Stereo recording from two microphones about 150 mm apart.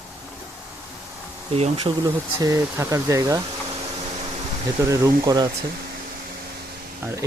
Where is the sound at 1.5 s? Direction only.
40° right (ahead or behind).